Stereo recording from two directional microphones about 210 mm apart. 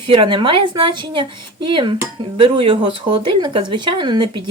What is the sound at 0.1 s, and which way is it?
Speech, 25° right (ahead or behind).